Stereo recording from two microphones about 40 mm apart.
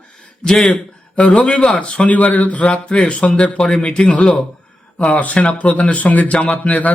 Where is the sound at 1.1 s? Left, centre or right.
Left.